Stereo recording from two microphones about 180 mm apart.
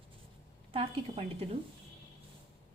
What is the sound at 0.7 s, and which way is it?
Speech, 30° right (ahead or behind).